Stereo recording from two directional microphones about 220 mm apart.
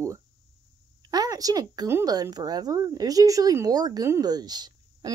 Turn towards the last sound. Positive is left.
turn(degrees=-20)  # may be behind; listen again after turning